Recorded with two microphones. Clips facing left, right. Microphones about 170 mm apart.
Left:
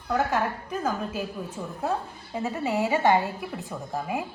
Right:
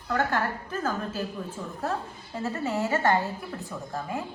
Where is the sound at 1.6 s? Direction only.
5° left (ahead or behind).